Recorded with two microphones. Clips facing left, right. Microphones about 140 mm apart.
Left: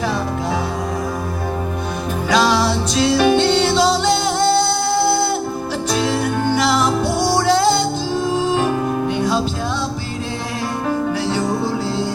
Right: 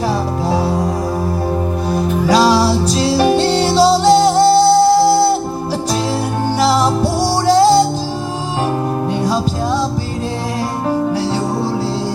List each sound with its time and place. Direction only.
2.2 s music: 35° right (ahead or behind)
6.5 s music: 35° right (ahead or behind)